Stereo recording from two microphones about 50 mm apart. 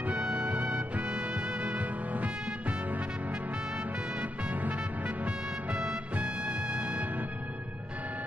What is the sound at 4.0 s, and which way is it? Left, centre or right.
Music, centre.